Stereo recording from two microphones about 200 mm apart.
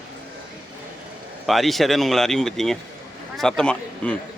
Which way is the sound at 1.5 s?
Centre (ahead or behind).